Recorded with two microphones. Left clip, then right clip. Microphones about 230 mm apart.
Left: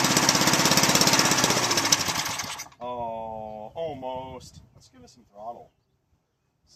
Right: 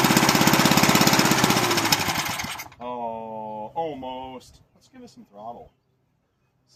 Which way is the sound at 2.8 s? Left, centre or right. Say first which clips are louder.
Right 1 dB; centre.